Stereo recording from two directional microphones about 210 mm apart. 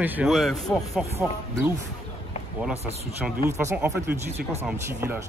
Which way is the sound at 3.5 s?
10° right (ahead or behind).